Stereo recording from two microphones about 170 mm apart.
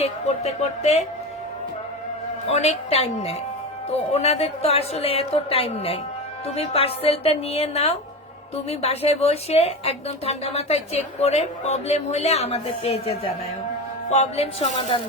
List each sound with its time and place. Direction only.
0.0 s a woman's voice: 40° left (ahead or behind)
2.5 s a woman's voice: 40° left (ahead or behind)